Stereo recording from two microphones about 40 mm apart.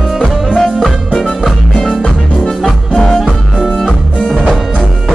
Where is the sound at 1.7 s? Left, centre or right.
Centre.